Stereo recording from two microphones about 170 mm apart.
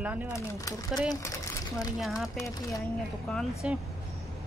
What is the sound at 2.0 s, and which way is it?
Speech, centre (ahead or behind).